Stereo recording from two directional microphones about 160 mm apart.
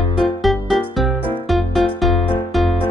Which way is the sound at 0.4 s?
Centre (ahead or behind).